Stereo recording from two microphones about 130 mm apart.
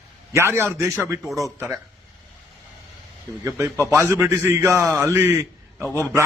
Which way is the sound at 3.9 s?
15° right (ahead or behind).